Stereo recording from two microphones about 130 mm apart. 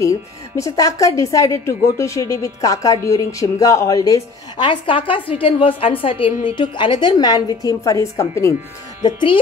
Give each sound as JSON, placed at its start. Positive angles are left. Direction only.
{"t": 0.6, "sound": "a woman's voice", "side_deg": 25}
{"t": 9.0, "sound": "a woman's voice", "side_deg": 40}